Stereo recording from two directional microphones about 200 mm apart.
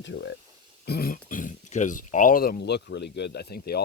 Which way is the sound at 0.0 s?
65° left (ahead or behind).